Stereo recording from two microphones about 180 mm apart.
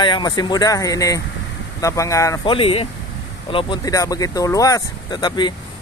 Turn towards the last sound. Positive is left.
turn(degrees=25)  # may be behind; listen again after turning